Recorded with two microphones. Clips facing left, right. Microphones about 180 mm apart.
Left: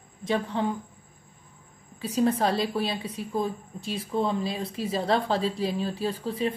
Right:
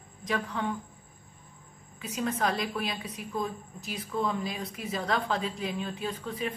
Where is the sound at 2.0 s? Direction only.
35° left (ahead or behind).